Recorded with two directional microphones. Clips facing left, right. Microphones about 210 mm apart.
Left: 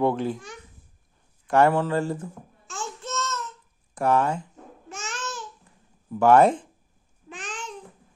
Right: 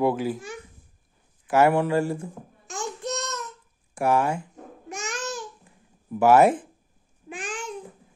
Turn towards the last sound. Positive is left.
turn(degrees=-10)  # may be behind; listen again after turning